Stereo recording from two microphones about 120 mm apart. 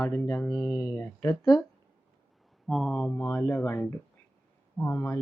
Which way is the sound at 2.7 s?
Centre (ahead or behind).